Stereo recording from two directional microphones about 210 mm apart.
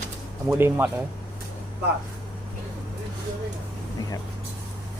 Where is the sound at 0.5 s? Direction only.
10° right (ahead or behind).